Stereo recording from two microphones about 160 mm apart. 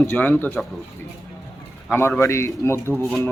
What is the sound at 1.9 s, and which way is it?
Speech, 10° left (ahead or behind).